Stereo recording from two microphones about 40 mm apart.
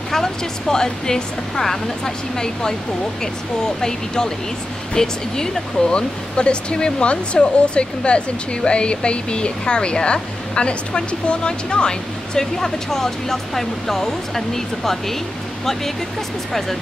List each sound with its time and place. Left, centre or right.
0.1 s speech: centre